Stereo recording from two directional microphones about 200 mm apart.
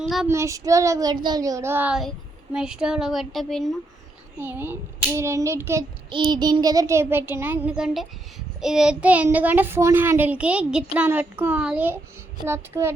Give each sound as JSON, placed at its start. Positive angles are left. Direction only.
{"t": 0.3, "sound": "a child's voice", "side_deg": -15}
{"t": 4.4, "sound": "a child's voice", "side_deg": -10}